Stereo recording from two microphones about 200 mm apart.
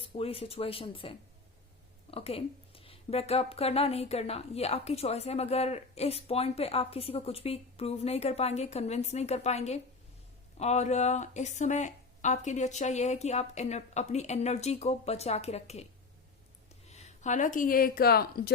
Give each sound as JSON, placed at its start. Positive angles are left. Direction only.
{"t": 0.0, "sound": "speech", "side_deg": 30}
{"t": 16.9, "sound": "speech", "side_deg": 35}